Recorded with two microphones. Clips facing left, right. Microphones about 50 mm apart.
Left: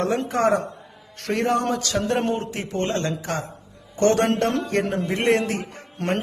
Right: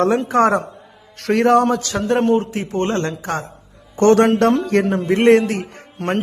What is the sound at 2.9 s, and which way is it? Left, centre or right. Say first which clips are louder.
Speech: right 4 dB; right.